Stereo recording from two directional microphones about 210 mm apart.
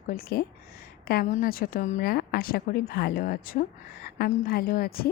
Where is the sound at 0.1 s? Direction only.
45° left (ahead or behind).